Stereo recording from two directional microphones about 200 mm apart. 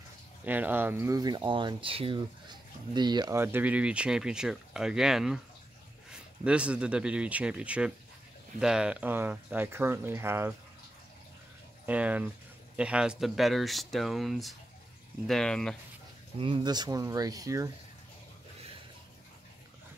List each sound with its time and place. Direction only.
0.5 s speech: 10° right (ahead or behind)
11.8 s speech: 5° right (ahead or behind)
16.3 s speech: 25° right (ahead or behind)